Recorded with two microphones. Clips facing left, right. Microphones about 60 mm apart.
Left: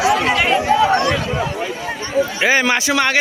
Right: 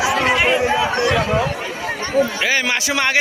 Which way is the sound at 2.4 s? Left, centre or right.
Left.